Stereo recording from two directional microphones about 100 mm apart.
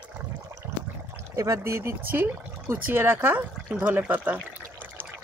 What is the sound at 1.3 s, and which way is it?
Speech, 30° right (ahead or behind).